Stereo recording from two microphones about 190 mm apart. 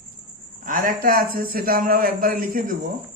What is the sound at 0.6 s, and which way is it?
A man's voice, 45° right (ahead or behind).